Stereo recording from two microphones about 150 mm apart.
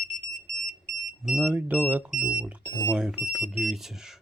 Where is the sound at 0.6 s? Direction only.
Centre (ahead or behind).